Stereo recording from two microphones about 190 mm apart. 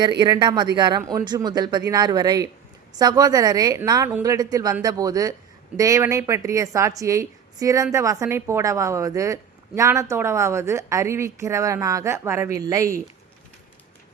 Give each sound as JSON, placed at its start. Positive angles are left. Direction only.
{"t": 0.2, "sound": "a woman's voice", "side_deg": -20}